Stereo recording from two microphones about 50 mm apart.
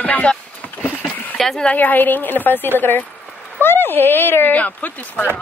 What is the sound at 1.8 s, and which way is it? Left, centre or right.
Speech, left.